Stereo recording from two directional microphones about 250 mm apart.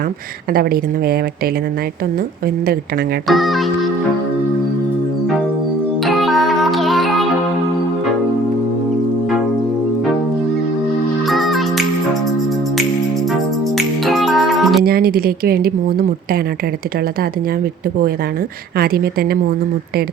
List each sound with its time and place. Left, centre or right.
0.5 s a woman's voice: right
3.2 s speech: centre
6.1 s music: centre
11.3 s music: centre
13.7 s music: centre
14.8 s speech: right
18.8 s a woman's voice: right